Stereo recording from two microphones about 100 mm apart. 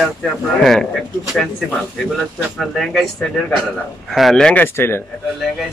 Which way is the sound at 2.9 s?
10° left (ahead or behind).